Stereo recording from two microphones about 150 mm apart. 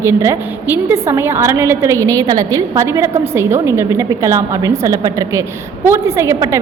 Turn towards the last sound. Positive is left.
turn(degrees=-20)  # may be behind; listen again after turning